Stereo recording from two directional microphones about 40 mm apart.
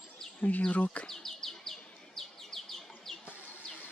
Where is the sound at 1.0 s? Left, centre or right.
Centre.